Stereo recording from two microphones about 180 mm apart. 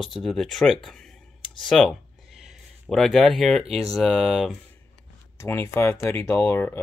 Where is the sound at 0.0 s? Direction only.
Centre (ahead or behind).